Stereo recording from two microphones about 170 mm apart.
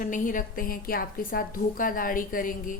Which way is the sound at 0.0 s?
50° left (ahead or behind).